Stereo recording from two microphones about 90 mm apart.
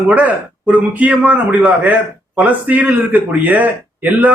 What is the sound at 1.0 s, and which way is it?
A man's voice, 15° right (ahead or behind).